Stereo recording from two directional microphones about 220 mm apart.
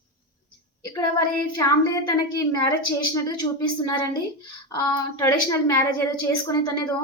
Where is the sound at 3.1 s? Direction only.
20° left (ahead or behind).